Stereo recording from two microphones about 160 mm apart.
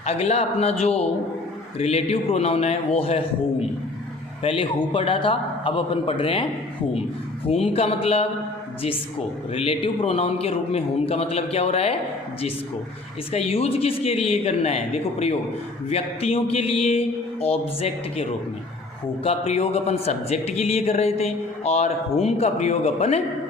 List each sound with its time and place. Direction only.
0.0 s a man's voice: 40° left (ahead or behind)
7.4 s a man's voice: 35° left (ahead or behind)
9.5 s a man's voice: 35° left (ahead or behind)
13.3 s a man's voice: 40° left (ahead or behind)
15.9 s a man's voice: 40° left (ahead or behind)